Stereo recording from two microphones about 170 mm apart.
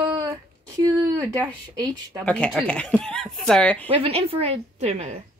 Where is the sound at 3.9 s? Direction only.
35° right (ahead or behind).